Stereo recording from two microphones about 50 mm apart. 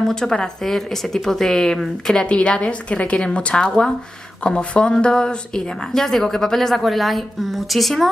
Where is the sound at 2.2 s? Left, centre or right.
Left; by 8.1 s centre.